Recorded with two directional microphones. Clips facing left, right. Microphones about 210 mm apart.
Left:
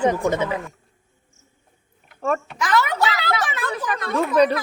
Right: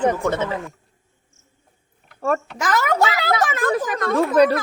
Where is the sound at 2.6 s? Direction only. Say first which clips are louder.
Right 1 dB; 45° right (ahead or behind).